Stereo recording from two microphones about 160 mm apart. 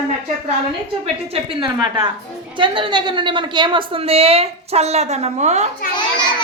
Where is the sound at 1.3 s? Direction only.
35° right (ahead or behind).